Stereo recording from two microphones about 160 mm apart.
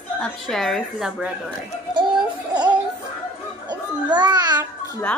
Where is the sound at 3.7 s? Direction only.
25° right (ahead or behind).